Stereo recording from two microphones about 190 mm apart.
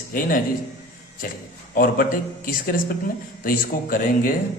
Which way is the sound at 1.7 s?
45° left (ahead or behind).